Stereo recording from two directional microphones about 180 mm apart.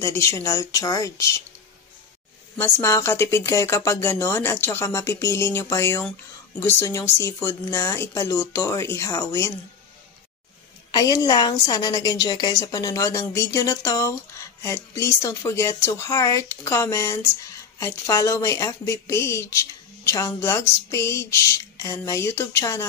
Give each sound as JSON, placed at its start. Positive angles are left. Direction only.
{"t": 0.0, "sound": "speech", "side_deg": 15}
{"t": 2.5, "sound": "speech", "side_deg": 15}
{"t": 10.9, "sound": "a woman's voice", "side_deg": 20}